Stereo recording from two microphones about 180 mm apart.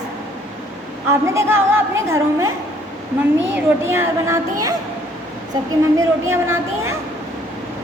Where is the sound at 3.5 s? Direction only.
15° right (ahead or behind).